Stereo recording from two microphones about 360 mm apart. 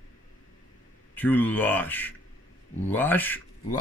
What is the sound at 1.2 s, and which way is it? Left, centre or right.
Speech, centre.